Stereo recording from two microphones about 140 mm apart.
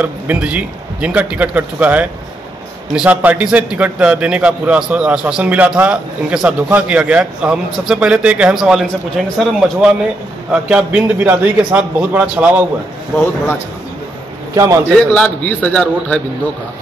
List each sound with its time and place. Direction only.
0.0 s a man's voice: 10° right (ahead or behind)
14.5 s a man's voice: 25° right (ahead or behind)
15.0 s a man's voice: 10° left (ahead or behind)